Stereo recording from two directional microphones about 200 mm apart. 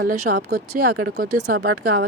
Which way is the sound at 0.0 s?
50° right (ahead or behind).